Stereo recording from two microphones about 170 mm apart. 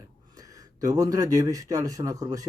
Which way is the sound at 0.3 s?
20° right (ahead or behind).